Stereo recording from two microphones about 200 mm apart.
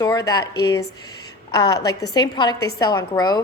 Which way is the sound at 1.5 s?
15° left (ahead or behind).